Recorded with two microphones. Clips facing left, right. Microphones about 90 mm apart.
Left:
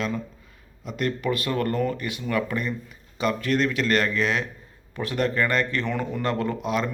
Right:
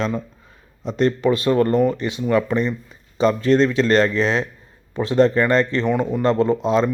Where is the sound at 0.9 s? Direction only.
30° right (ahead or behind).